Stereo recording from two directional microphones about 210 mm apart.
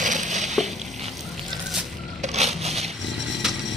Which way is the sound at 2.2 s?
30° right (ahead or behind).